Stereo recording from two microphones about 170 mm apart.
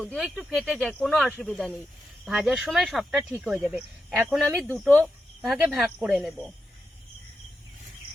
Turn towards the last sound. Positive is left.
turn(degrees=0)  # may be behind; listen again after turning